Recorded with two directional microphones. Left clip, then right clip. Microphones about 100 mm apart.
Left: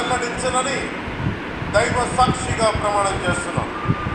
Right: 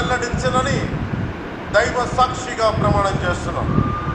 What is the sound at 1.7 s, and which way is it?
A man's voice, 35° right (ahead or behind).